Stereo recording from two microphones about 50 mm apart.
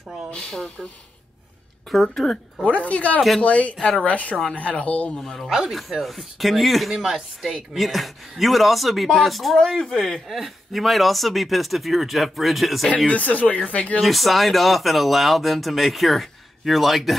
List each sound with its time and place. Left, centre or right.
1.9 s speech: centre
2.6 s speech: left
5.1 s speech: centre
13.1 s speech: left
14.0 s speech: centre